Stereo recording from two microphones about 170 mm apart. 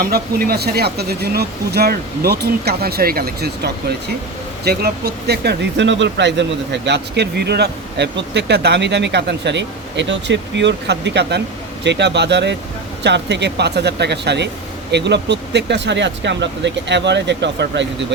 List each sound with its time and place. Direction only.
0.0 s speech: 60° right (ahead or behind); by 17.8 s 90° right